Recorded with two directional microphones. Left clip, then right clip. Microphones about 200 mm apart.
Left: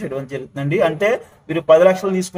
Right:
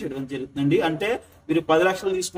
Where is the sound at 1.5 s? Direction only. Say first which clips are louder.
Left 8 dB; 20° right (ahead or behind).